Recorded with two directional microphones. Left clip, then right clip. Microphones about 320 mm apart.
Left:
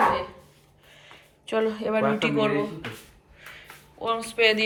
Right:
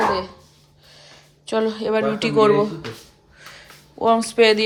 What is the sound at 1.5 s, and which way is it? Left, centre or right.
Speech, centre.